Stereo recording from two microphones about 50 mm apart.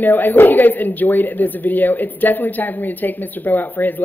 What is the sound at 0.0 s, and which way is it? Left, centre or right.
Speech, left.